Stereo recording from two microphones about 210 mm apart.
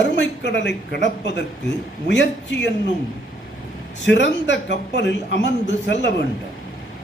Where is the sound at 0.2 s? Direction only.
55° left (ahead or behind).